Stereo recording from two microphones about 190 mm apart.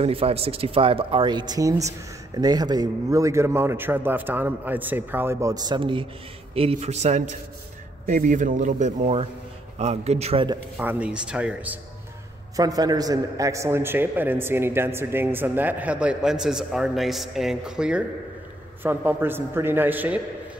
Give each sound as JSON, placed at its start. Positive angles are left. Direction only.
{"t": 0.0, "sound": "a man's voice", "side_deg": -30}
{"t": 10.8, "sound": "speech", "side_deg": -10}
{"t": 12.5, "sound": "a man's voice", "side_deg": -20}